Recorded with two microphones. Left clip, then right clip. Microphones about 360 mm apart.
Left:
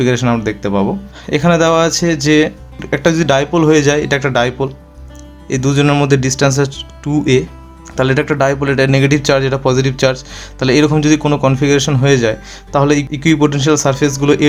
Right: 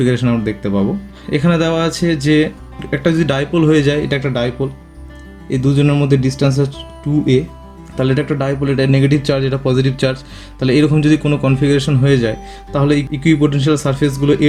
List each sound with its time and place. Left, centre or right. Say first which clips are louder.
0.0 s speech: left 2 dB; centre